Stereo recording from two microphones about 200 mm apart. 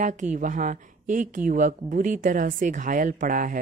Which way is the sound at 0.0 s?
40° right (ahead or behind).